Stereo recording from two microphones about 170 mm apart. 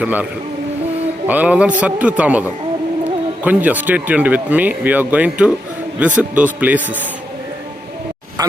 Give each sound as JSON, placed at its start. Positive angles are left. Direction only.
{"t": 0.0, "sound": "speech", "side_deg": -10}
{"t": 1.3, "sound": "speech", "side_deg": -10}
{"t": 3.4, "sound": "speech", "side_deg": -10}
{"t": 8.4, "sound": "speech", "side_deg": -25}